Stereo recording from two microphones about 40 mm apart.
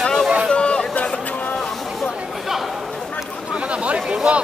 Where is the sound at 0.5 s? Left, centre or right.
Left.